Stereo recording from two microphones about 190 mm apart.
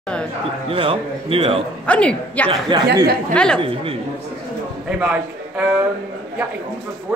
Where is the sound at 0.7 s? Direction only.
30° right (ahead or behind).